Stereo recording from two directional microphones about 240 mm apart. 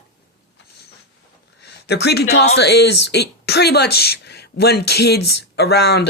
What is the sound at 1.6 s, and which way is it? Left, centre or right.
A man's voice, left.